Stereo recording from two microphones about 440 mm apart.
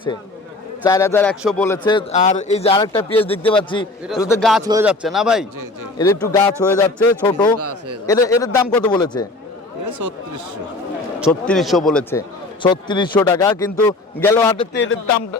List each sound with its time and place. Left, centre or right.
0.9 s a man's voice: centre
7.6 s speech: right
8.0 s a man's voice: centre
9.8 s speech: right
11.2 s a man's voice: centre
14.7 s speech: left